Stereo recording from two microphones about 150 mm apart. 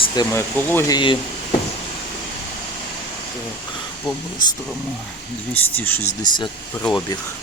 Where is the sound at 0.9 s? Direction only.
30° left (ahead or behind).